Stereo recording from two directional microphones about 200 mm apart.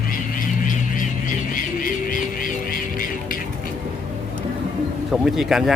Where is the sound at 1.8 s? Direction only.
45° left (ahead or behind).